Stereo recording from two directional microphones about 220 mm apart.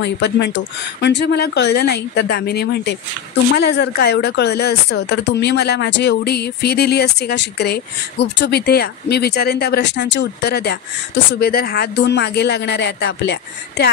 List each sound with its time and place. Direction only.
0.0 s speech: 50° left (ahead or behind)